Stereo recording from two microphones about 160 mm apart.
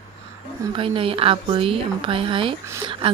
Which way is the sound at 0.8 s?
35° right (ahead or behind).